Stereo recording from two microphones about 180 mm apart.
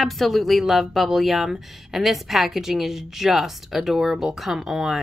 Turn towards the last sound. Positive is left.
turn(degrees=0)  # may be behind; listen again after turning